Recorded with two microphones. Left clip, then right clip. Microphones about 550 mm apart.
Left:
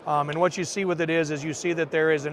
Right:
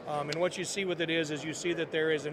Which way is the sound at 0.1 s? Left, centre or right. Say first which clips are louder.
Left 8 dB; left.